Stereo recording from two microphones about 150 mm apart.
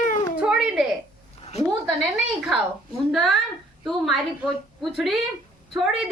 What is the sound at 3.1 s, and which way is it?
Speech, centre (ahead or behind).